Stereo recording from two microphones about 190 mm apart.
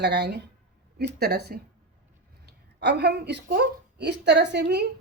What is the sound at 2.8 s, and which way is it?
A woman's voice, 60° right (ahead or behind).